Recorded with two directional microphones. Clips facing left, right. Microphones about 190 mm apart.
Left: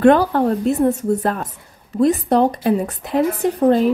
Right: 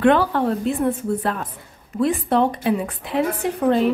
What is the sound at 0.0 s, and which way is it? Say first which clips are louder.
Speech: left 4 dB; 40° left (ahead or behind).